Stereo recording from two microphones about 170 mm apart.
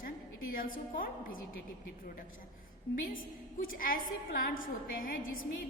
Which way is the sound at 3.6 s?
55° left (ahead or behind).